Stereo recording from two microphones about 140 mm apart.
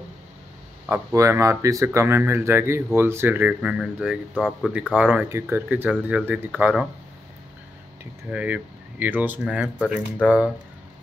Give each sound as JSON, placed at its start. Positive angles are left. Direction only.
{"t": 0.8, "sound": "speech", "side_deg": -20}
{"t": 4.5, "sound": "speech", "side_deg": 5}
{"t": 4.9, "sound": "speech", "side_deg": -10}
{"t": 8.0, "sound": "speech", "side_deg": -10}